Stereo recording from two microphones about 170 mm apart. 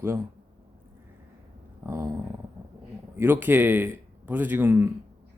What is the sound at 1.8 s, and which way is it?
Speech, 15° right (ahead or behind).